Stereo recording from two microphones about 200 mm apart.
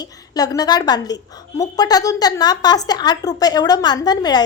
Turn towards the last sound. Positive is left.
turn(degrees=20)  # may be behind; listen again after turning